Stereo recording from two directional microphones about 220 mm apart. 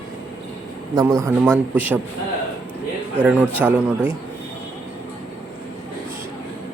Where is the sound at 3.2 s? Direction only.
5° right (ahead or behind).